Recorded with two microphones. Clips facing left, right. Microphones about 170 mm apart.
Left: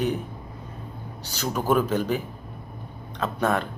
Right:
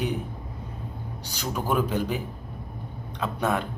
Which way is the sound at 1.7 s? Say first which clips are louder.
Left 3 dB; 45° left (ahead or behind).